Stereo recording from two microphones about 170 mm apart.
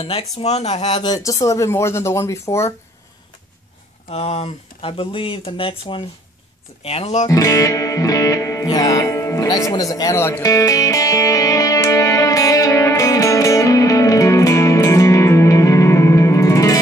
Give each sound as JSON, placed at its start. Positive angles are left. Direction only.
{"t": 0.0, "sound": "speech", "side_deg": 35}
{"t": 0.9, "sound": "speech", "side_deg": 25}
{"t": 4.1, "sound": "speech", "side_deg": 40}
{"t": 7.2, "sound": "music", "side_deg": 20}